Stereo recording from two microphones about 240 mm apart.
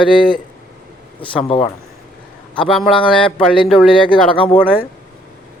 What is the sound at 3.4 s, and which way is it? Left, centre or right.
Speech, centre.